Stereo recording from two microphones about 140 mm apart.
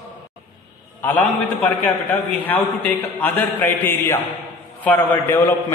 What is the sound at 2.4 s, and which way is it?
A man's voice, 10° left (ahead or behind).